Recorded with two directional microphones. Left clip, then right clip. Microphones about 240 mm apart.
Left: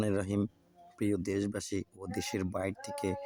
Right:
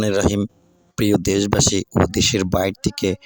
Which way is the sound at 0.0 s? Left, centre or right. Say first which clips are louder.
Right 14 dB; right.